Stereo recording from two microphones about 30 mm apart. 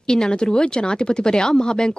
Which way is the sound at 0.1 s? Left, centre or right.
Left.